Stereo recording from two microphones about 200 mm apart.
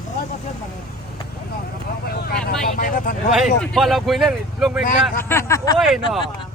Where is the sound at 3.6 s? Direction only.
Centre (ahead or behind).